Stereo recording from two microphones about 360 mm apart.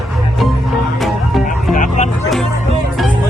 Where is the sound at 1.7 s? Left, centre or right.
Centre.